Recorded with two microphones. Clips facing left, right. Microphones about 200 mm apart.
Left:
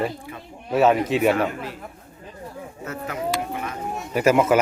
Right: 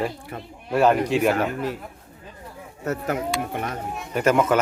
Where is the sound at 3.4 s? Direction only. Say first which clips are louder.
Right 1 dB; 55° right (ahead or behind).